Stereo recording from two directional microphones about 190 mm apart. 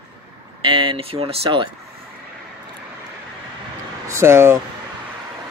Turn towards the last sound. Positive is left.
turn(degrees=-15)  # may be behind; listen again after turning